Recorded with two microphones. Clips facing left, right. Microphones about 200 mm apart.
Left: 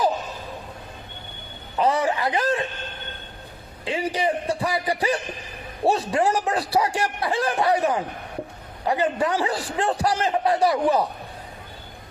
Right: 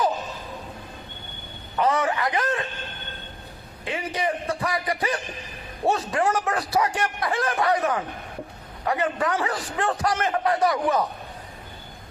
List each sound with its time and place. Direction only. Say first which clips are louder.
1.8 s a man's voice: left 1 dB; 30° left (ahead or behind)
3.8 s a man's voice: left 3 dB; 30° left (ahead or behind)